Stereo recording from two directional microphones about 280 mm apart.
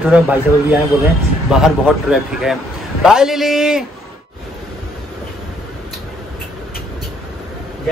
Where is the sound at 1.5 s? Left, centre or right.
Centre.